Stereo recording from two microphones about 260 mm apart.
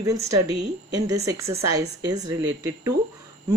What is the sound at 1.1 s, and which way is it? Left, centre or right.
Speech, centre.